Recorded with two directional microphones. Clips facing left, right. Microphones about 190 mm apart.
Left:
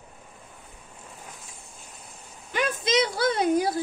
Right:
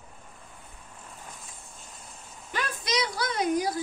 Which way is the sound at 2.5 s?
25° left (ahead or behind).